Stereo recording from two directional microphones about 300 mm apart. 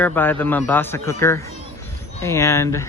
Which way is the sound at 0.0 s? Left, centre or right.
Centre.